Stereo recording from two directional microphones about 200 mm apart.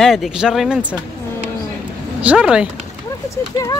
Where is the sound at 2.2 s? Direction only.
5° right (ahead or behind).